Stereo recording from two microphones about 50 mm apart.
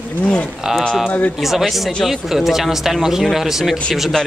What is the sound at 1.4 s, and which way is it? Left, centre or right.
Speech, centre.